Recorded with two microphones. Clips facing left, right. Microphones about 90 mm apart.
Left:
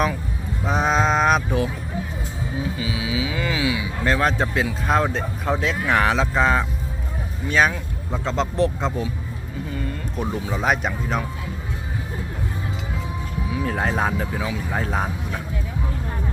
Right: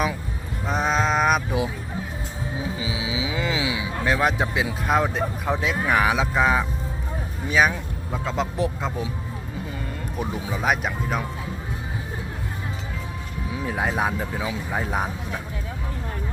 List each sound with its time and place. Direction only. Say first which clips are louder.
0.6 s music: left 3 dB; centre (ahead or behind)
2.7 s speech: left 2 dB; 20° right (ahead or behind)
10.2 s speech: left 2 dB; 15° right (ahead or behind)
10.5 s speech: left 1 dB; centre (ahead or behind)
13.6 s speech: left 1 dB; 5° right (ahead or behind)